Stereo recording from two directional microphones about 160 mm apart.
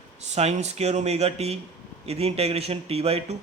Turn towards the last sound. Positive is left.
turn(degrees=-40)  # may be behind; listen again after turning